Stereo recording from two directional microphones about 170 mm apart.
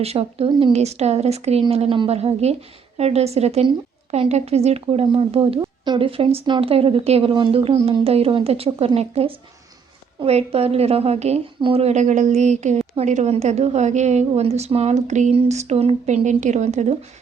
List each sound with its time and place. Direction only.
0.0 s a woman's voice: 35° right (ahead or behind)